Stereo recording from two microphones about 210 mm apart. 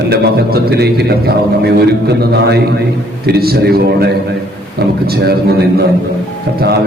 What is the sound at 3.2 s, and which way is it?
A man's voice, 50° right (ahead or behind).